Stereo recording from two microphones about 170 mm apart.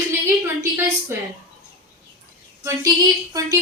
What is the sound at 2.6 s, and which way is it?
Speech, 15° right (ahead or behind).